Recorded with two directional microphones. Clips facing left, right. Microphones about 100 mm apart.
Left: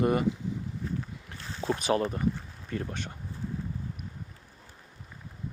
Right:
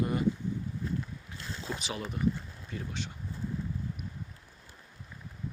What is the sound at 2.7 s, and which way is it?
Speech, 50° left (ahead or behind).